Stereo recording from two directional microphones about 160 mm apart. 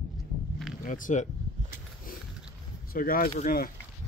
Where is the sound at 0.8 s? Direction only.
55° left (ahead or behind).